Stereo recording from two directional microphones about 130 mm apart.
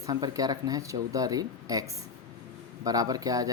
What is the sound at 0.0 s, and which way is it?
Speech, 30° right (ahead or behind).